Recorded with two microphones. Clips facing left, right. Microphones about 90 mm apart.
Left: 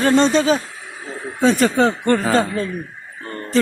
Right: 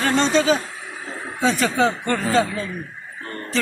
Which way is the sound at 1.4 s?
45° left (ahead or behind).